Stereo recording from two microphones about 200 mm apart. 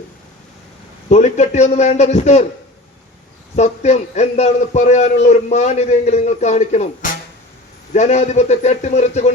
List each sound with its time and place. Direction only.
1.1 s a man's voice: 35° left (ahead or behind)
3.5 s a man's voice: 35° left (ahead or behind)